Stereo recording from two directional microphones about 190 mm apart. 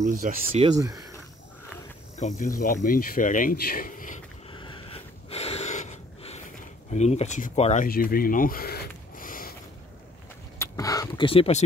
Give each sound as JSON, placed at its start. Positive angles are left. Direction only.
{"t": 0.0, "sound": "speech", "side_deg": -50}
{"t": 0.5, "sound": "speech", "side_deg": -30}
{"t": 0.7, "sound": "speech", "side_deg": -15}
{"t": 2.1, "sound": "speech", "side_deg": 40}
{"t": 4.5, "sound": "snort", "side_deg": 25}
{"t": 6.9, "sound": "speech", "side_deg": 35}
{"t": 7.8, "sound": "a sound", "side_deg": 50}
{"t": 10.6, "sound": "speech", "side_deg": 20}